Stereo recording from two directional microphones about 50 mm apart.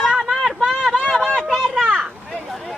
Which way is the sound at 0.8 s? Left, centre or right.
Centre.